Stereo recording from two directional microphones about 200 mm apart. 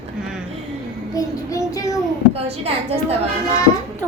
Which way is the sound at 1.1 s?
15° left (ahead or behind).